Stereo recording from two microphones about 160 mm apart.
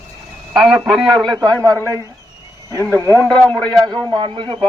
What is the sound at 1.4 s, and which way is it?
Speech, 25° right (ahead or behind).